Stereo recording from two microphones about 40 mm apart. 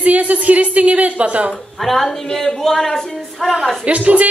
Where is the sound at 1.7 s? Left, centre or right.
Centre.